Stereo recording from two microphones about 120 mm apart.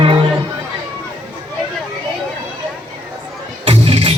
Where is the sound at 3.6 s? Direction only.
50° right (ahead or behind).